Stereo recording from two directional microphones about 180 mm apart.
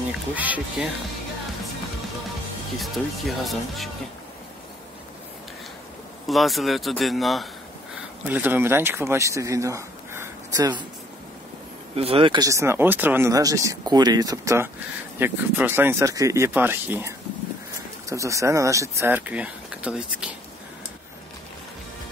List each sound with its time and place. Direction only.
0.4 s speech: 10° right (ahead or behind)
2.8 s speech: centre (ahead or behind)
6.2 s speech: centre (ahead or behind); by 10.7 s 15° right (ahead or behind)
11.9 s speech: 35° right (ahead or behind); by 17.1 s 10° right (ahead or behind)
18.1 s speech: 15° right (ahead or behind)